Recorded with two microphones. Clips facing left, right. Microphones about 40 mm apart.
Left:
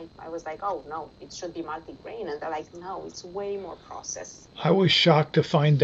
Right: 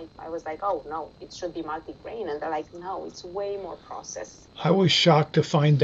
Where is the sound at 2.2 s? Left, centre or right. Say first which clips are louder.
Right 2 dB; right.